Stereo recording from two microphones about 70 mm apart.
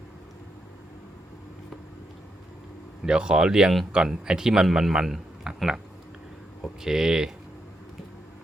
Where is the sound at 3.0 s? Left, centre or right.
Centre.